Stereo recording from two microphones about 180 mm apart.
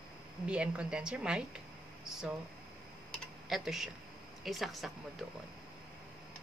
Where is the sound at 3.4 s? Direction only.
Centre (ahead or behind).